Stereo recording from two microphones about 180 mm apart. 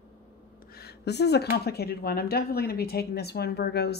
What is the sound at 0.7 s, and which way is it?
Speech, 65° left (ahead or behind).